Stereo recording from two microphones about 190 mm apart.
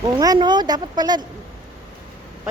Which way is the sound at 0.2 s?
20° right (ahead or behind).